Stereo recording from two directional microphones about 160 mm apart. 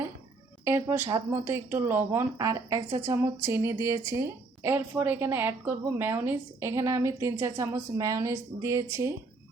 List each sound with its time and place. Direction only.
0.6 s speech: 15° right (ahead or behind)